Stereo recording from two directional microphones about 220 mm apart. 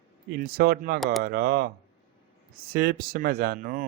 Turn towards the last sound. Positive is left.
turn(degrees=-40)  # may be behind; listen again after turning